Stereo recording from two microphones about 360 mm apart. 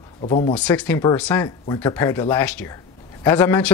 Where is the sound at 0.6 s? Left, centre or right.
Centre.